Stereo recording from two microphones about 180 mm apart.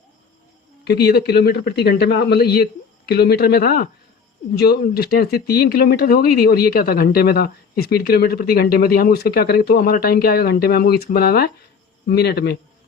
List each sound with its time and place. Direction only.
0.9 s speech: 60° left (ahead or behind)